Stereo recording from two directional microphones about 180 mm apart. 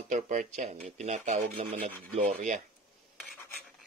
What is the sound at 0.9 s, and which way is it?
Rub, 40° right (ahead or behind).